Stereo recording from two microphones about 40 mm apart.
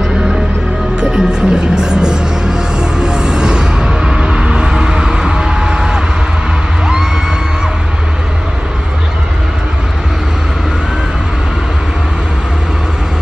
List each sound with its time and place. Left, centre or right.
1.0 s music: centre